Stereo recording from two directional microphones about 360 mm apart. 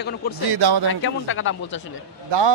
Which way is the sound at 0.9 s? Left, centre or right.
Left.